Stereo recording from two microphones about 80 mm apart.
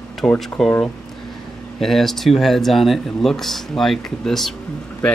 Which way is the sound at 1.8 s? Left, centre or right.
Centre.